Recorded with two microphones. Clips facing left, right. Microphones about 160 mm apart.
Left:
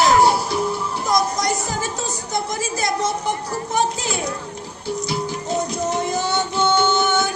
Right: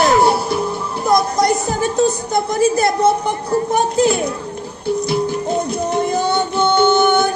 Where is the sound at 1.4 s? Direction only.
55° right (ahead or behind).